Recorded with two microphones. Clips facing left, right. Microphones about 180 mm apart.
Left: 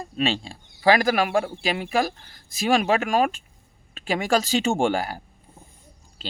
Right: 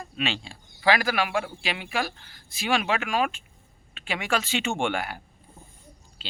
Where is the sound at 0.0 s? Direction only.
35° left (ahead or behind).